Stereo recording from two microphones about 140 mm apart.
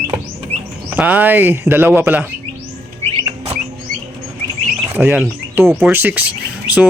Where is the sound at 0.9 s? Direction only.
10° right (ahead or behind).